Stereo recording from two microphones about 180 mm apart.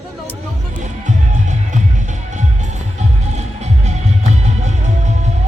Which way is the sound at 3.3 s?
40° right (ahead or behind).